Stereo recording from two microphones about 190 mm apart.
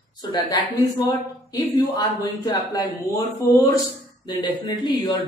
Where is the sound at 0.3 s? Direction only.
20° left (ahead or behind).